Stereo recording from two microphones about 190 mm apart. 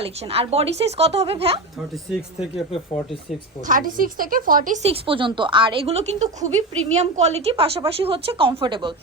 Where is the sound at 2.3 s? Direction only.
35° left (ahead or behind).